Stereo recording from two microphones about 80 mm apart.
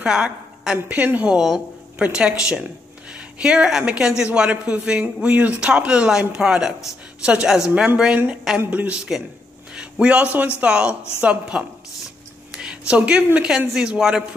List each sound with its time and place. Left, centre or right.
0.0 s a woman's voice: centre